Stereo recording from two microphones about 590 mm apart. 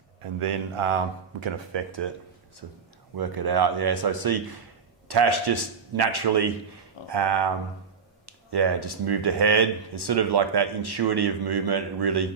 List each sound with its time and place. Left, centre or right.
0.2 s a man's voice: right
3.2 s speech: right